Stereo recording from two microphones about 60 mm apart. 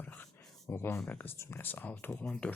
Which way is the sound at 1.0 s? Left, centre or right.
Left.